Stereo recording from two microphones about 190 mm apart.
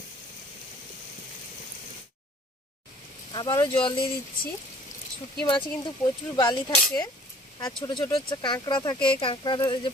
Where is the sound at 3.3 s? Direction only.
15° left (ahead or behind).